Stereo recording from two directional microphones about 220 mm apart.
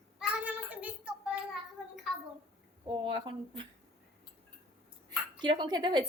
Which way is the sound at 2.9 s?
20° right (ahead or behind).